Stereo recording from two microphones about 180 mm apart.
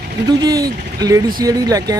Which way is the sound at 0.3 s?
20° right (ahead or behind).